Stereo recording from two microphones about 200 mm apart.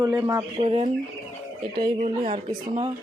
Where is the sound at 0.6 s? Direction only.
30° right (ahead or behind).